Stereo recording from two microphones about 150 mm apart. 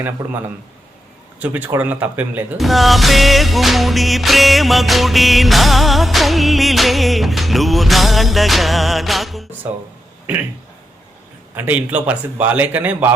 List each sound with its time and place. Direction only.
0.2 s a man's voice: 25° right (ahead or behind)
1.4 s speech: 10° right (ahead or behind)
2.6 s music: centre (ahead or behind)
11.5 s speech: 10° right (ahead or behind)